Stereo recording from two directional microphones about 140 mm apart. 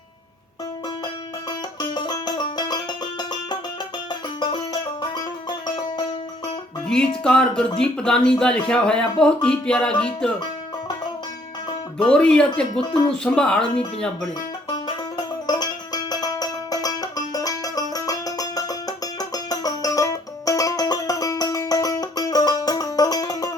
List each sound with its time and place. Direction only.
1.8 s music: 30° left (ahead or behind)
4.4 s music: 30° left (ahead or behind)
6.8 s music: 5° left (ahead or behind)
7.3 s speech: 5° left (ahead or behind)
11.9 s speech: 5° left (ahead or behind)
15.4 s music: 30° left (ahead or behind)